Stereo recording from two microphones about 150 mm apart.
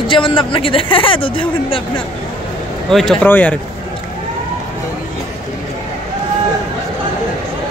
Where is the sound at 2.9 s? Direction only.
Centre (ahead or behind).